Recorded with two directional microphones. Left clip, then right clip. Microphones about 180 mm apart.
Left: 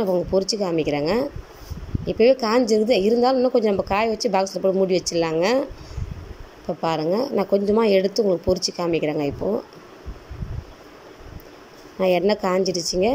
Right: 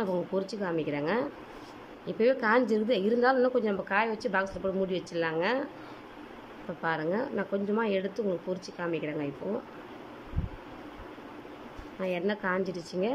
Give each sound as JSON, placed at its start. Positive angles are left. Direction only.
{"t": 0.0, "sound": "a woman's voice", "side_deg": 15}
{"t": 6.8, "sound": "a woman's voice", "side_deg": 20}
{"t": 12.0, "sound": "a woman's voice", "side_deg": 25}